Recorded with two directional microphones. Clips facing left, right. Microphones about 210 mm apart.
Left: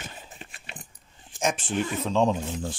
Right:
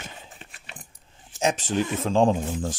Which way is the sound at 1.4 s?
40° right (ahead or behind).